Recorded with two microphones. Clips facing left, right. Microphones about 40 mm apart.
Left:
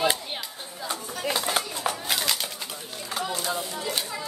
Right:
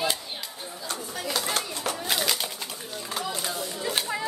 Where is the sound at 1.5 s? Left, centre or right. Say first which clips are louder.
Left 2 dB; centre.